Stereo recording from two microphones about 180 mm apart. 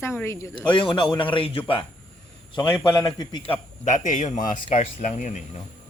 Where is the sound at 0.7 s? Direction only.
25° left (ahead or behind).